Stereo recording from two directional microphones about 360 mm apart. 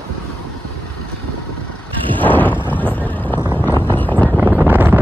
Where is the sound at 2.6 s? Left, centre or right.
Centre.